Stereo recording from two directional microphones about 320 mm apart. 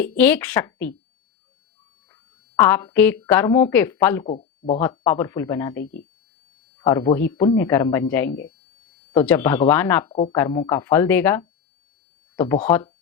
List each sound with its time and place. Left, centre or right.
0.2 s a woman's voice: centre
2.6 s speech: centre
4.3 s speech: left
4.8 s speech: centre
5.8 s speech: left
6.7 s speech: centre
12.6 s speech: centre